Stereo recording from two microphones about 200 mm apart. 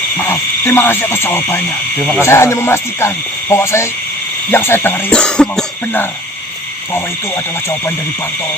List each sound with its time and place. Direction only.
0.3 s speech: 10° left (ahead or behind)